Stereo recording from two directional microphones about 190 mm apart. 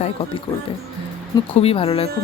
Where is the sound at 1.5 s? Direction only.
30° left (ahead or behind).